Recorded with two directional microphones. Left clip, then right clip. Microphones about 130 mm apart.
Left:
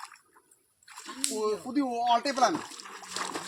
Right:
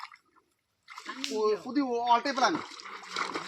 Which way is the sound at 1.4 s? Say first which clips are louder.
Right 2 dB; 15° left (ahead or behind).